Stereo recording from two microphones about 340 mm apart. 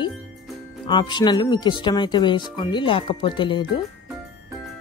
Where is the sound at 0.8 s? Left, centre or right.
Centre.